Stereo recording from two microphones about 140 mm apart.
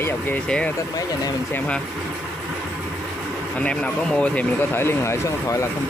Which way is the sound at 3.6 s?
10° left (ahead or behind).